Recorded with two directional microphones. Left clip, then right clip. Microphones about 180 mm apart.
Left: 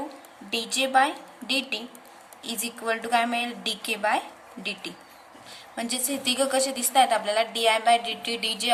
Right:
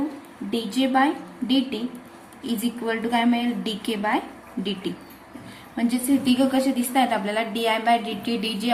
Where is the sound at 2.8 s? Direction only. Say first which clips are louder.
Even; 35° left (ahead or behind).